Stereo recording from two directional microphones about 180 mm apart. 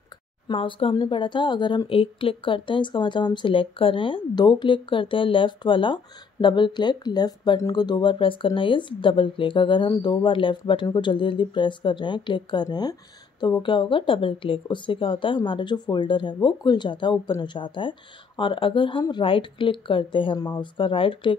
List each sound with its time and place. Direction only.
0.5 s speech: 30° left (ahead or behind)